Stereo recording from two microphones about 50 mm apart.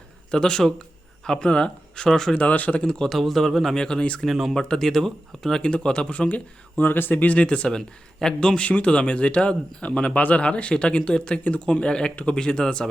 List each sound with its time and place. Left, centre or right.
0.3 s speech: centre
2.3 s speech: left
2.8 s speech: centre
3.8 s speech: centre
4.2 s speech: centre
4.5 s speech: centre
5.6 s speech: left